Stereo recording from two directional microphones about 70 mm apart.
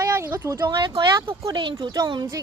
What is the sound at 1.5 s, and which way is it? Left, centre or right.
Speech, right.